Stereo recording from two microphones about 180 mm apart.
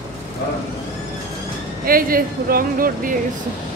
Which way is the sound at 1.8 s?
55° right (ahead or behind).